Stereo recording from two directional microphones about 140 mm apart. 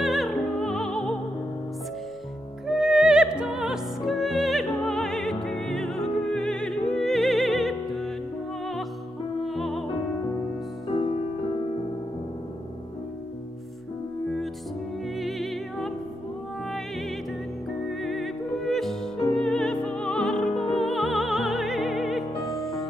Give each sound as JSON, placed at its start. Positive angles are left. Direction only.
{"t": 0.0, "sound": "music", "side_deg": 0}
{"t": 2.6, "sound": "music", "side_deg": -5}
{"t": 9.4, "sound": "music", "side_deg": 0}
{"t": 10.9, "sound": "music", "side_deg": 40}
{"t": 15.1, "sound": "music", "side_deg": 0}
{"t": 17.8, "sound": "music", "side_deg": 0}